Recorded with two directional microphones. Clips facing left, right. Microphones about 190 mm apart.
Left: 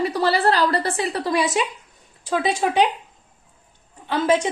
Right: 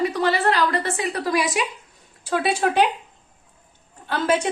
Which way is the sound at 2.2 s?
15° left (ahead or behind).